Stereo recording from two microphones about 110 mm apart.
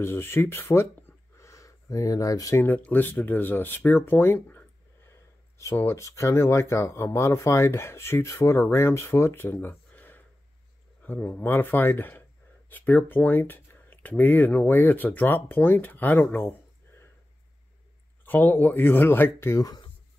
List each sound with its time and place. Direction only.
0.0 s speech: 20° left (ahead or behind)
2.6 s speech: 15° left (ahead or behind)
18.2 s speech: 15° left (ahead or behind)